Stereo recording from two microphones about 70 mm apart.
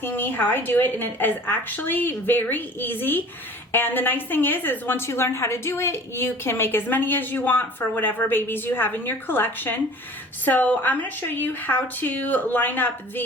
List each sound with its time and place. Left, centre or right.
0.0 s a woman's voice: left